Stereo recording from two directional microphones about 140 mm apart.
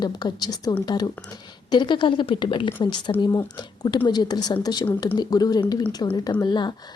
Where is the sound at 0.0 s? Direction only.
30° left (ahead or behind).